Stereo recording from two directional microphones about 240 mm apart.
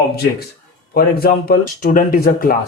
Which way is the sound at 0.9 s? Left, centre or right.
Left.